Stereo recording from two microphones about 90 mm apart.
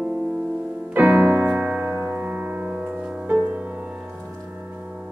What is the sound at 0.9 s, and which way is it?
Piano, 20° right (ahead or behind).